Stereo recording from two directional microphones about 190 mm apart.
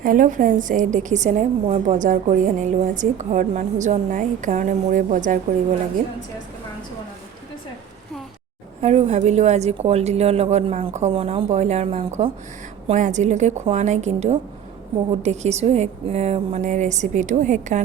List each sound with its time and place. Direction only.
0.0 s a woman's voice: 45° right (ahead or behind)
8.8 s a woman's voice: 35° right (ahead or behind)